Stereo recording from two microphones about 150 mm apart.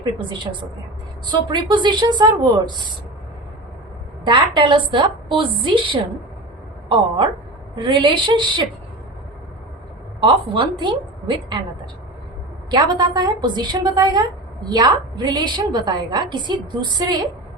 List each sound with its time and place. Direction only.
0.2 s a woman's voice: 35° right (ahead or behind)
4.3 s a woman's voice: 35° right (ahead or behind)
10.2 s a woman's voice: 35° right (ahead or behind)
12.7 s a woman's voice: 30° right (ahead or behind)